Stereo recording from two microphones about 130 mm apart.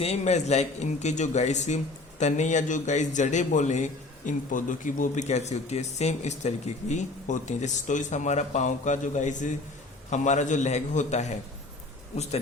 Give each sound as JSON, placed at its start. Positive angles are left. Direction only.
{"t": 0.0, "sound": "a man's voice", "side_deg": 55}
{"t": 4.3, "sound": "a man's voice", "side_deg": 85}